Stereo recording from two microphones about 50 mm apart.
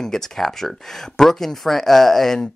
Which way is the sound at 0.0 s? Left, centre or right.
Centre.